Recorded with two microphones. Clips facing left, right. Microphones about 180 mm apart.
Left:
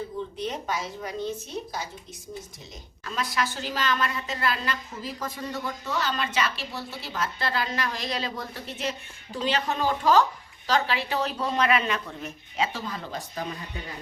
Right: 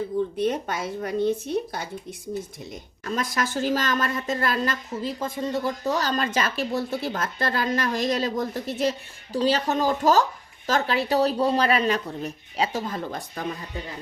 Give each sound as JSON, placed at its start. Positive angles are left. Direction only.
{"t": 0.3, "sound": "a woman's voice", "side_deg": -55}
{"t": 3.0, "sound": "a woman's voice", "side_deg": -45}
{"t": 5.0, "sound": "speech", "side_deg": -25}